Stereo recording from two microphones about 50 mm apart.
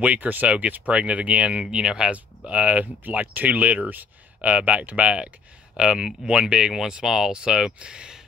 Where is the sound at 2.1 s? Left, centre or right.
Right.